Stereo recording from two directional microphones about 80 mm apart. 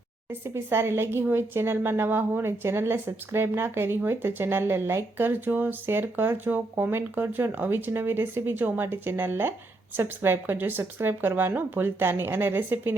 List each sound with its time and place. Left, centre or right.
0.3 s speech: right